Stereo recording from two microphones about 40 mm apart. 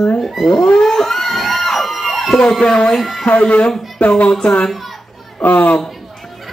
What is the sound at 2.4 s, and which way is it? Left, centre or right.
Speech, centre.